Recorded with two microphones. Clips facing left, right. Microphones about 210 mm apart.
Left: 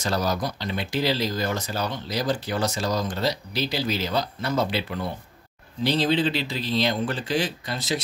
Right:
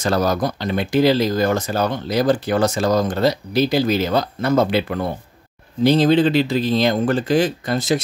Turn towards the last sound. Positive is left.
turn(degrees=-50)  # may be behind; listen again after turning